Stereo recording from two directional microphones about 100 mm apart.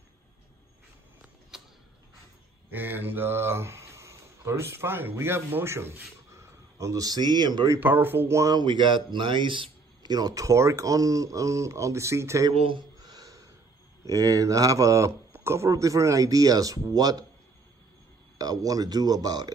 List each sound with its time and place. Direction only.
2.7 s speech: 20° right (ahead or behind); by 7.7 s 45° right (ahead or behind)
7.8 s speech: 20° right (ahead or behind)
8.5 s a man's voice: 55° right (ahead or behind)
10.1 s speech: 40° right (ahead or behind)
12.5 s speech: 65° right (ahead or behind)
13.0 s a sound: 40° right (ahead or behind)
14.0 s speech: 35° right (ahead or behind)
18.4 s speech: 40° right (ahead or behind)